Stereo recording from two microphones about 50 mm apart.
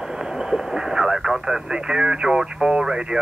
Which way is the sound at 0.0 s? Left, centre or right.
Centre.